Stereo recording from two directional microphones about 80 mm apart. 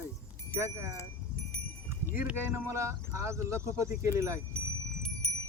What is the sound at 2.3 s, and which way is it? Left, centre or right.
Speech, right.